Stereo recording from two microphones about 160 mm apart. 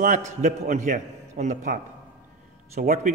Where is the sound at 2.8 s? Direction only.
55° right (ahead or behind).